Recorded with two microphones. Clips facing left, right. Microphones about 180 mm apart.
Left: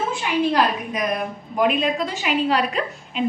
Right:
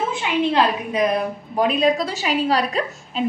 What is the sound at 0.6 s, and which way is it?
A woman's voice, 30° right (ahead or behind).